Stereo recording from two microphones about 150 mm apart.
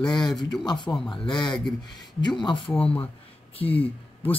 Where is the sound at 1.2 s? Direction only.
30° left (ahead or behind).